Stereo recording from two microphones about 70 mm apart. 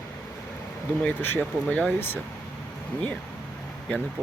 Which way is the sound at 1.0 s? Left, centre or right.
Left.